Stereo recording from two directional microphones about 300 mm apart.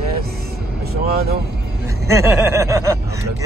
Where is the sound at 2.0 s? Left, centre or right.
Centre.